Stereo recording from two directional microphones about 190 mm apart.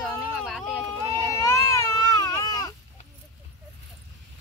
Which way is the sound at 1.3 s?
20° left (ahead or behind).